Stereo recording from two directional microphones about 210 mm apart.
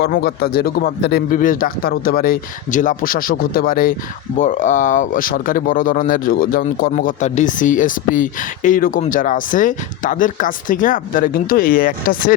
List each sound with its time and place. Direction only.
0.0 s speech: 50° left (ahead or behind)